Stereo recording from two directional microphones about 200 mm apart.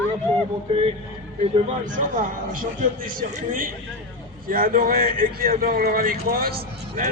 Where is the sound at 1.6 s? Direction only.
40° right (ahead or behind).